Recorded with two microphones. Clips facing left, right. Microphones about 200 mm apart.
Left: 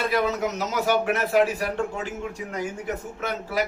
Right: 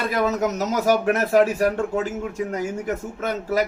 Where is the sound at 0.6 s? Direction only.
45° right (ahead or behind).